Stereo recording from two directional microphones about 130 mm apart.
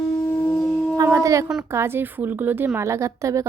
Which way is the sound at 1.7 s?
20° right (ahead or behind).